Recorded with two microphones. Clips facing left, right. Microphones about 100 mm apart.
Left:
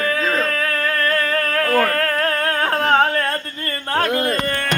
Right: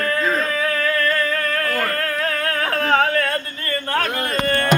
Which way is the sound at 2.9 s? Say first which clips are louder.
Even; 30° left (ahead or behind).